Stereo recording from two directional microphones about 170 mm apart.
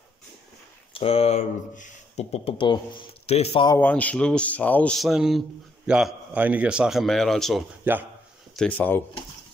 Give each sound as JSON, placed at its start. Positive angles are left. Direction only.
{"t": 0.9, "sound": "speech", "side_deg": 35}
{"t": 3.7, "sound": "a man's voice", "side_deg": 10}
{"t": 7.8, "sound": "speech", "side_deg": -10}
{"t": 8.5, "sound": "speech", "side_deg": 10}